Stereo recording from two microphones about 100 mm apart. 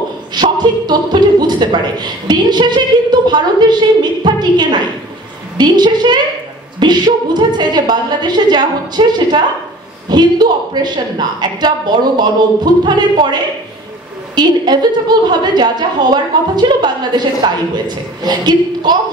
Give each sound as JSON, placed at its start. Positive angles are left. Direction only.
{"t": 0.3, "sound": "a woman's voice", "side_deg": -45}